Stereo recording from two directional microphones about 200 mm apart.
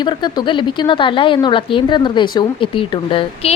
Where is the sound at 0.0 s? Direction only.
20° left (ahead or behind).